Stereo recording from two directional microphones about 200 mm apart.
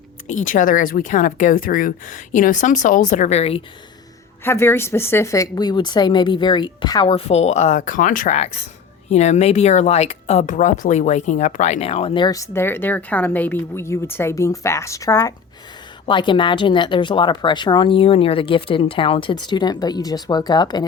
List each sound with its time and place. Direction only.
0.3 s a woman's voice: 40° left (ahead or behind)
4.4 s speech: 10° left (ahead or behind)